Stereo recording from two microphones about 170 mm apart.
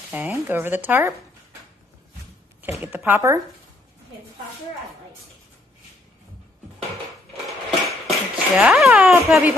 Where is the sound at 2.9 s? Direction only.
10° right (ahead or behind).